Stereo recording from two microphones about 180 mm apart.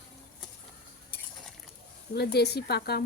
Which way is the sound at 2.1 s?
65° left (ahead or behind).